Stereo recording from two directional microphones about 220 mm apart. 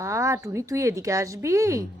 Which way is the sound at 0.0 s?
15° right (ahead or behind).